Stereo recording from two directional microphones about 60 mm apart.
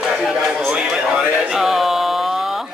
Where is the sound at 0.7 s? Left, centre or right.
Centre.